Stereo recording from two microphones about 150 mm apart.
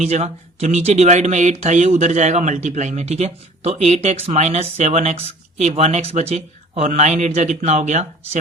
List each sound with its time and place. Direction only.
0.0 s speech: 45° right (ahead or behind)